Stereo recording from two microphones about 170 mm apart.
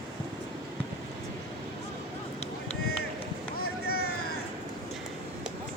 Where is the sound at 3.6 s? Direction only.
70° left (ahead or behind).